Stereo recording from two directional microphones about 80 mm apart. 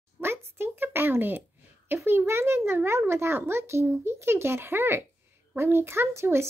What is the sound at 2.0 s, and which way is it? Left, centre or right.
A child's voice, right.